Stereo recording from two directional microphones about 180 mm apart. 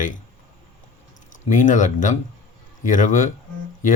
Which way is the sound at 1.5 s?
45° left (ahead or behind).